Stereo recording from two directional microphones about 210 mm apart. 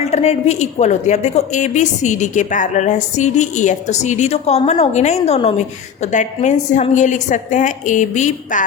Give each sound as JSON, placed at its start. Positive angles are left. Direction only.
{"t": 0.0, "sound": "a woman's voice", "side_deg": 30}